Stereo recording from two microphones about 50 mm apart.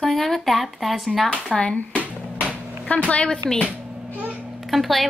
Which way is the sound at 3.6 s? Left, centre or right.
Right.